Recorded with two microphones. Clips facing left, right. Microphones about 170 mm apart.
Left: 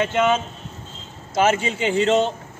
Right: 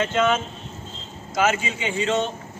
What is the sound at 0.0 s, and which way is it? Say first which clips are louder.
Speech: left 2 dB; 15° left (ahead or behind).